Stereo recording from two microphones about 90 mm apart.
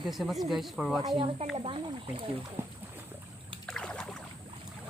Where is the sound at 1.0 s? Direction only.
65° right (ahead or behind).